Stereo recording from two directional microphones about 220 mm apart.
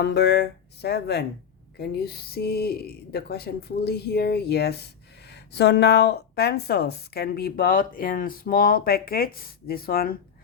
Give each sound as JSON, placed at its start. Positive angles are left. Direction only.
{"t": 0.0, "sound": "speech", "side_deg": 50}